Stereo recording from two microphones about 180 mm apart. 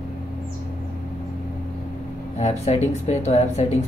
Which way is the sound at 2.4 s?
40° left (ahead or behind).